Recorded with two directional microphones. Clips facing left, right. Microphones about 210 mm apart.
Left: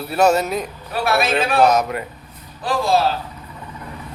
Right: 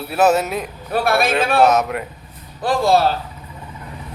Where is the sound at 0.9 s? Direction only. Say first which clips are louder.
Right 2 dB; 45° right (ahead or behind).